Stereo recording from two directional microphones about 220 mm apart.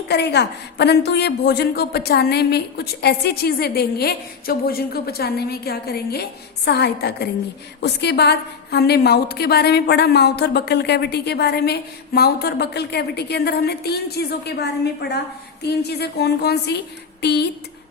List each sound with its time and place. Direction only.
0.1 s a woman's voice: 50° left (ahead or behind)